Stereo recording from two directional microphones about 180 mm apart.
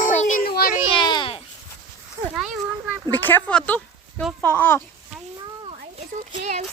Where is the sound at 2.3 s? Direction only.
5° right (ahead or behind).